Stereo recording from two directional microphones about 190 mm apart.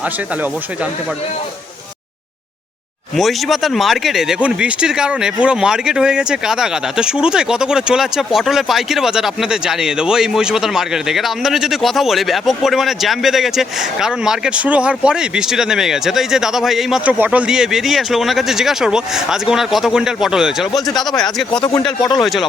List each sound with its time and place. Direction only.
3.2 s speech: centre (ahead or behind)
21.5 s speech: 25° left (ahead or behind)
22.2 s speech: centre (ahead or behind)